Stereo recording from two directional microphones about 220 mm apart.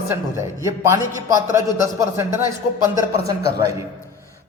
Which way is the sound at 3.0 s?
15° right (ahead or behind).